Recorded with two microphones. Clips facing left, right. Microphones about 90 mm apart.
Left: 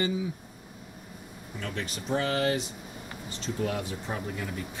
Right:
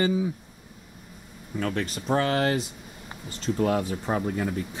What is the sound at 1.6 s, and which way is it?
Speech, 45° right (ahead or behind).